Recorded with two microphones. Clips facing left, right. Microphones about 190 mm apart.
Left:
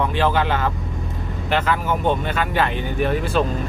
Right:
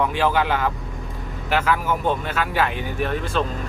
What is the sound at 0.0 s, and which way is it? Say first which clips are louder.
Speech: left 1 dB; 10° right (ahead or behind).